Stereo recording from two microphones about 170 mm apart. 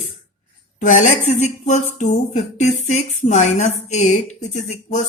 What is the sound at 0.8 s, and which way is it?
Speech, 45° left (ahead or behind).